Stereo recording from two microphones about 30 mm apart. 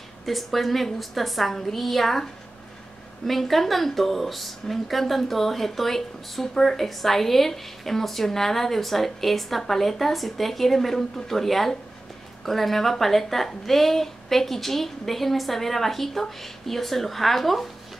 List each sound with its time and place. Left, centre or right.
0.2 s a woman's voice: centre
3.3 s a woman's voice: centre